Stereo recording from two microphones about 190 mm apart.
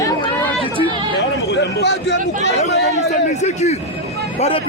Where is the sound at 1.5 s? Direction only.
65° left (ahead or behind).